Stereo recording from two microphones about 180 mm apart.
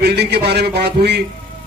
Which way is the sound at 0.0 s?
65° right (ahead or behind).